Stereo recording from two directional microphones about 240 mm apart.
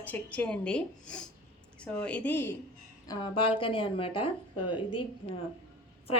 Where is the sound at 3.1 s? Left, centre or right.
Left.